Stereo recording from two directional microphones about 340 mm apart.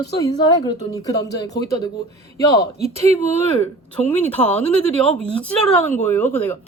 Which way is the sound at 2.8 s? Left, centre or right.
Centre.